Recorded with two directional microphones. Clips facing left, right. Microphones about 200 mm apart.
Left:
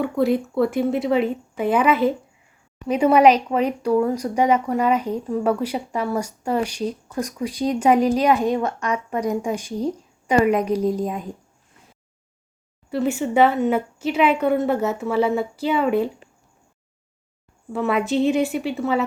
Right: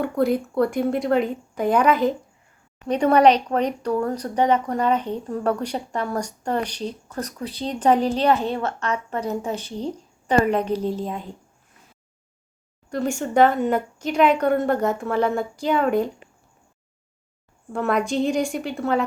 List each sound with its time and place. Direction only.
0.0 s a woman's voice: centre (ahead or behind)
12.9 s a woman's voice: 5° left (ahead or behind)
17.7 s a woman's voice: 5° left (ahead or behind)